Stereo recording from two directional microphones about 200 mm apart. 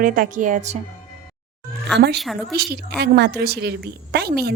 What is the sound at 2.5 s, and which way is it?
A woman's voice, 50° right (ahead or behind).